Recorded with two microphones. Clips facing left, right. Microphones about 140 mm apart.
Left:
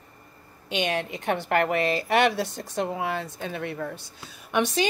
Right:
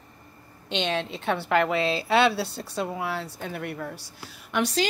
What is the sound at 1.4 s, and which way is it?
Speech, 60° left (ahead or behind).